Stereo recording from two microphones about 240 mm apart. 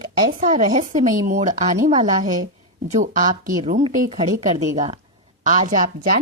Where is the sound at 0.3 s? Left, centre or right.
Right.